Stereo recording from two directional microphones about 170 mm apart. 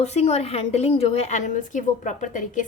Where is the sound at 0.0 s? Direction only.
40° left (ahead or behind).